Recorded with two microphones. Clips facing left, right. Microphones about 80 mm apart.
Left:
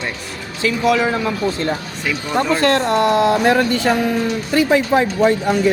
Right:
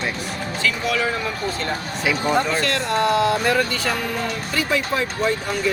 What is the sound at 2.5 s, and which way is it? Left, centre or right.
Speech, left.